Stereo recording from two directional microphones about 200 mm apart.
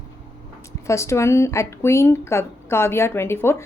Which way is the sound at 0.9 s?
15° left (ahead or behind).